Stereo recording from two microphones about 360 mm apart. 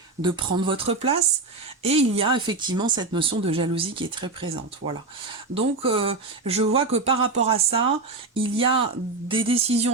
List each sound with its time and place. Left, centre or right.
0.2 s speech: centre
4.8 s speech: right
5.5 s speech: centre